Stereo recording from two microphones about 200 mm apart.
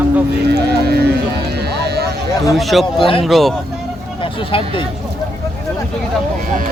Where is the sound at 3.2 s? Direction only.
Centre (ahead or behind).